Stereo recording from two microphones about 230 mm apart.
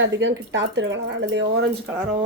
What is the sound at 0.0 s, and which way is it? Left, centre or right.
A woman's voice, right.